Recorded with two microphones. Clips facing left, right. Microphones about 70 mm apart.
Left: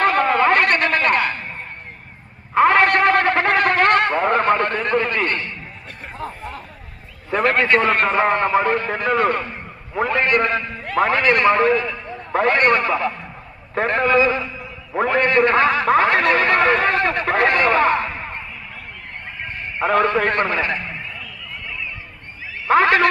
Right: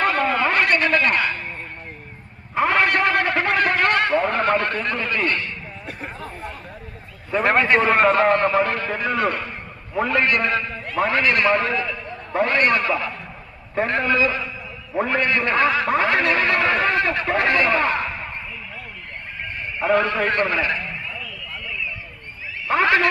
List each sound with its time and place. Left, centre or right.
0.0 s a sound: left
2.6 s a sound: left
7.3 s a man's voice: left
7.7 s a man's voice: centre
8.1 s a man's voice: centre
9.0 s a man's voice: left
14.9 s speech: left
15.2 s speech: left
17.2 s speech: left
17.7 s a sound: left
20.0 s speech: left
22.7 s speech: left